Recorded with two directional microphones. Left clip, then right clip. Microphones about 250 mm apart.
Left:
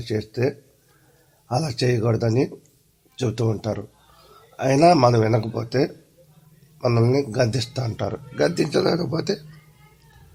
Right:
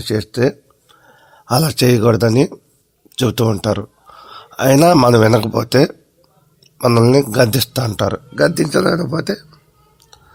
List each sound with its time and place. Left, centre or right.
0.0 s speech: right